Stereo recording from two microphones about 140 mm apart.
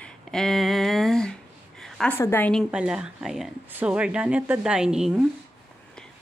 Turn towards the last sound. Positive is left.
turn(degrees=-5)  # may be behind; listen again after turning